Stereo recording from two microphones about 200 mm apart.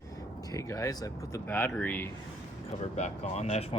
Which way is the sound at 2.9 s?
35° left (ahead or behind).